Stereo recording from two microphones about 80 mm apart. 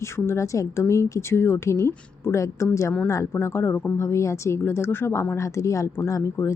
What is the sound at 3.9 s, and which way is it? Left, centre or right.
Speech, left.